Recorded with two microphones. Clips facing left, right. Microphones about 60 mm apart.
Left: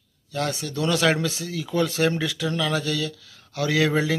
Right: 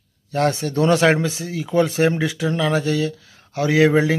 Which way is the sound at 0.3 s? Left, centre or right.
Right.